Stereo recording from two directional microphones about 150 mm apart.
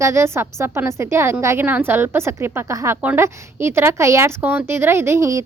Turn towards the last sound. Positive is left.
turn(degrees=-20)  # may be behind; listen again after turning